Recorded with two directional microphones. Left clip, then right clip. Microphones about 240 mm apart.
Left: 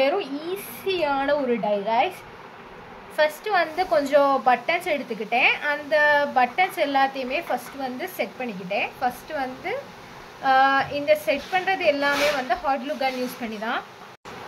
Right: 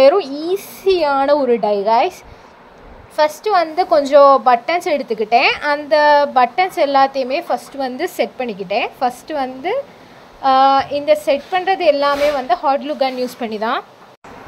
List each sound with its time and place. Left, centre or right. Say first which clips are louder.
0.0 s a woman's voice: right 11 dB; right
3.2 s a woman's voice: right 7 dB; right